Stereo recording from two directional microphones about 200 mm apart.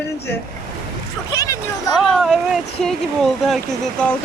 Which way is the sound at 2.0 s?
Centre (ahead or behind).